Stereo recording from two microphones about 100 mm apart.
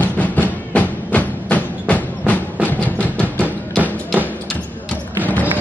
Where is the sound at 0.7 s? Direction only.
15° left (ahead or behind).